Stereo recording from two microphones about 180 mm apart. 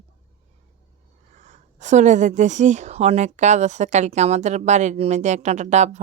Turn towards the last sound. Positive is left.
turn(degrees=-40)  # may be behind; listen again after turning